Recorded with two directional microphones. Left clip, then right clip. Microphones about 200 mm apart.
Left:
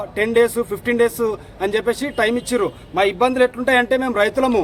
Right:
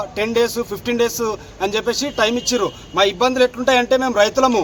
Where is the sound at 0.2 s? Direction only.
5° left (ahead or behind).